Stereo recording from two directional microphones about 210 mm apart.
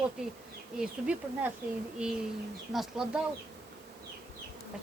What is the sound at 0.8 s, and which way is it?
Speech, 5° right (ahead or behind).